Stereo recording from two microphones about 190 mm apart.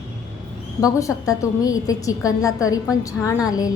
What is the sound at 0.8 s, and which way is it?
A woman's voice, 20° left (ahead or behind).